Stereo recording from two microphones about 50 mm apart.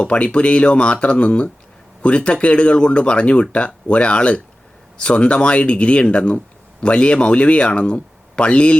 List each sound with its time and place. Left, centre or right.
0.0 s speech: left